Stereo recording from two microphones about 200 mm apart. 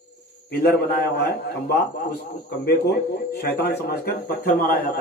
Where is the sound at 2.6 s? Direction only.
55° left (ahead or behind).